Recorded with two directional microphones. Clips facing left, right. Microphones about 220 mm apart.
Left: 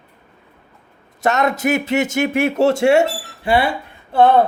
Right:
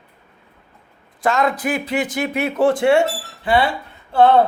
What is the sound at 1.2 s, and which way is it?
A woman's voice, 25° left (ahead or behind).